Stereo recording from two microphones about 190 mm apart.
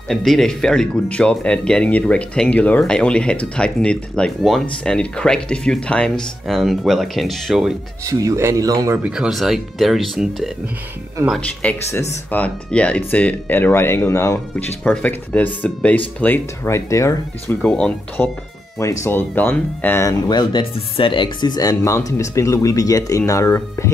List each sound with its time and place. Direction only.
0.1 s speech: centre (ahead or behind)
8.0 s speech: 15° right (ahead or behind); by 17.6 s 15° left (ahead or behind)
17.6 s speech: 5° left (ahead or behind)